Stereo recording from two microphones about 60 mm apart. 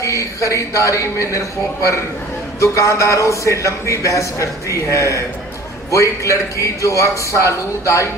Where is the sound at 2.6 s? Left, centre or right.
Left.